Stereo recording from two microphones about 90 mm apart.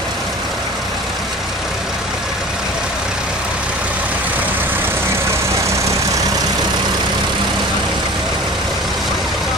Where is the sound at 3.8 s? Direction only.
20° right (ahead or behind); by 6.3 s 35° right (ahead or behind).